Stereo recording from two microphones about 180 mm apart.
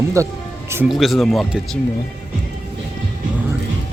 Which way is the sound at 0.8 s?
Centre (ahead or behind).